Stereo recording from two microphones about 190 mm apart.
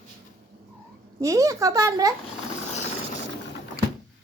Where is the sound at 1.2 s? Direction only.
15° right (ahead or behind).